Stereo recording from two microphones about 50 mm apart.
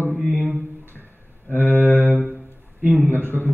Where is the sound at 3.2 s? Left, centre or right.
Left.